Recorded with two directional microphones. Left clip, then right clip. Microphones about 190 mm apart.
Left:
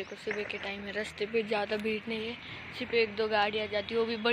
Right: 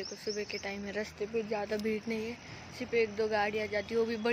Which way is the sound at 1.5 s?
5° right (ahead or behind).